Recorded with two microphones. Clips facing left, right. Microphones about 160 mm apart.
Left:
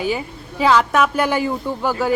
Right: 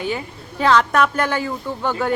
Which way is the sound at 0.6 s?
5° left (ahead or behind).